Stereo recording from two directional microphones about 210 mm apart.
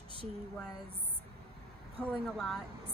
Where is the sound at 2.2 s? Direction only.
Centre (ahead or behind).